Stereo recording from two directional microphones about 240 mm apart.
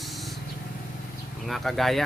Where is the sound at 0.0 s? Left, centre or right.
Centre.